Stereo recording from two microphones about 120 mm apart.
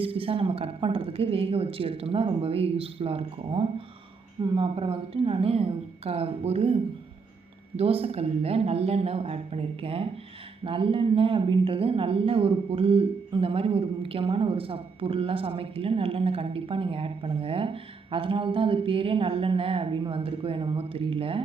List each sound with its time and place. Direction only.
0.0 s speech: 50° right (ahead or behind)